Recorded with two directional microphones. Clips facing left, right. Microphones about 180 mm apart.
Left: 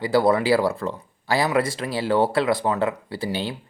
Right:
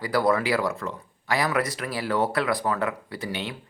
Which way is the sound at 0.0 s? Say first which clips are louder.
Left 4 dB; 25° left (ahead or behind).